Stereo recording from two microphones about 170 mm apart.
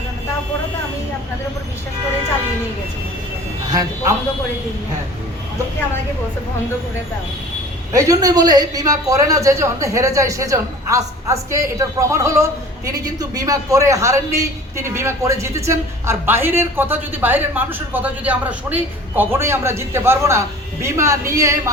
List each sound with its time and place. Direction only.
3.7 s speech: 20° right (ahead or behind)
7.9 s a man's voice: 20° right (ahead or behind)